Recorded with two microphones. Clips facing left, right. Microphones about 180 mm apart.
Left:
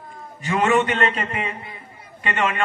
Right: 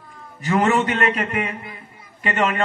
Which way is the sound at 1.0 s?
30° left (ahead or behind).